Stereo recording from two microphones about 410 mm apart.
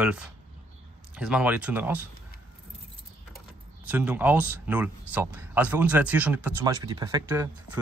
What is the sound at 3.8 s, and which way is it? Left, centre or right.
Speech, centre.